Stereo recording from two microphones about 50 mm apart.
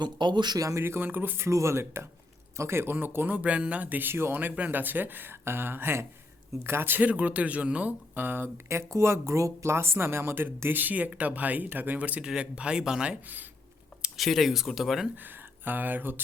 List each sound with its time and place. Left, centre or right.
0.8 s speech: right
1.5 s speech: right
2.9 s speech: right
3.3 s speech: right
4.1 s speech: right
4.5 s speech: right
8.1 s speech: right
8.7 s speech: right
12.2 s speech: centre
13.2 s speech: right
14.2 s speech: centre
15.1 s speech: right